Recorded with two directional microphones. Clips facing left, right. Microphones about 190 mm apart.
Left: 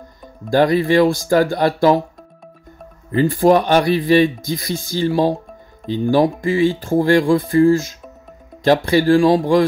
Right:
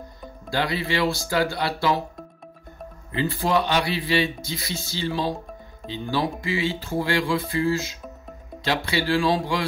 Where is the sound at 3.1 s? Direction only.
45° left (ahead or behind).